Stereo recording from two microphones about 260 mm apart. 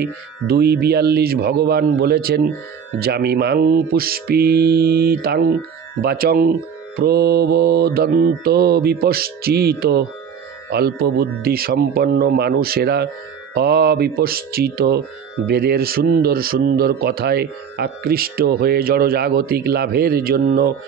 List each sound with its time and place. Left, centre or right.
0.0 s speech: right